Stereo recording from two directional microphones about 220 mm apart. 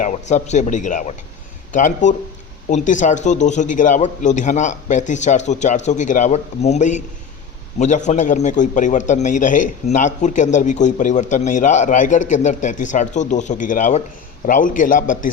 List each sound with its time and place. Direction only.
0.0 s a man's voice: 35° left (ahead or behind)